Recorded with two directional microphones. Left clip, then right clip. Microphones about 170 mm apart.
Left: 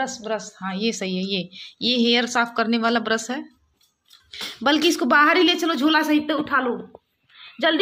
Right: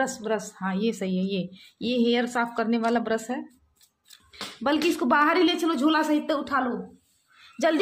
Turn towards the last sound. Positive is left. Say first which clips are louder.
# left 3 dB
turn(degrees=-5)  # may be behind; listen again after turning